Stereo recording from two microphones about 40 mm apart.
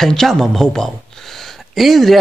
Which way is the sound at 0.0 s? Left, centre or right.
Centre.